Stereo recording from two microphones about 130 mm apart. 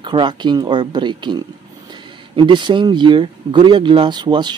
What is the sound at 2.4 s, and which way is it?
Speech, 35° right (ahead or behind).